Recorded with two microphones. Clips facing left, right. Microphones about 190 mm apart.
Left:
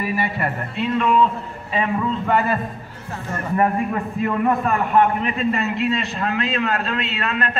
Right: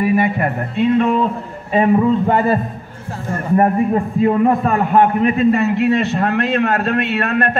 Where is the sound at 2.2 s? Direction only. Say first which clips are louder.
Right 5 dB; 25° right (ahead or behind).